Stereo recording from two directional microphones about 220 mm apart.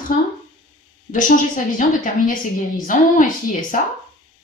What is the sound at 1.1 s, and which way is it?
A woman's voice, 35° left (ahead or behind).